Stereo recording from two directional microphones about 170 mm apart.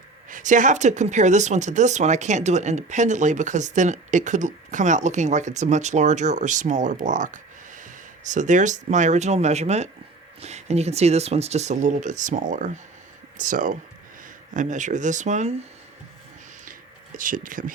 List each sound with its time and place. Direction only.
0.3 s speech: 50° right (ahead or behind)
17.2 s speech: 55° right (ahead or behind)